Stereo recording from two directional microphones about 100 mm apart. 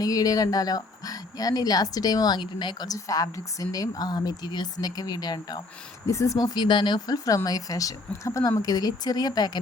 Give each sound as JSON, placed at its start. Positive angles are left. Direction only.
{"t": 0.0, "sound": "speech", "side_deg": 35}